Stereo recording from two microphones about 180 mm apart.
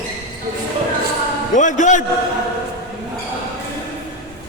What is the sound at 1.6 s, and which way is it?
Speech, 45° left (ahead or behind).